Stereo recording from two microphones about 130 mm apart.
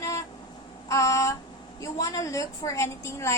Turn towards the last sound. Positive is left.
turn(degrees=20)  # may be behind; listen again after turning